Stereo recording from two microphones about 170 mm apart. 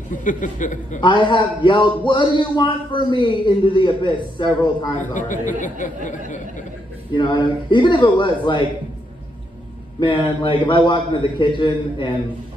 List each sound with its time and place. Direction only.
0.1 s speech: 50° left (ahead or behind)
1.0 s a man's voice: 30° left (ahead or behind)
5.0 s speech: 50° left (ahead or behind)
7.1 s a man's voice: 30° left (ahead or behind)
9.9 s a man's voice: 30° left (ahead or behind)